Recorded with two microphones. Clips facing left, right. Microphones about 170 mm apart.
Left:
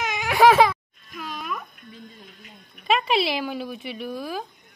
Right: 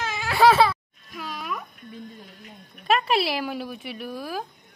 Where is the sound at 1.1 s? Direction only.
5° right (ahead or behind).